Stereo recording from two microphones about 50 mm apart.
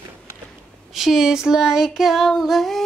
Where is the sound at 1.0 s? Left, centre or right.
Centre.